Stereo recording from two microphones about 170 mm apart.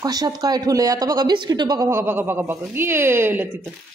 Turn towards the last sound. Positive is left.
turn(degrees=-15)  # may be behind; listen again after turning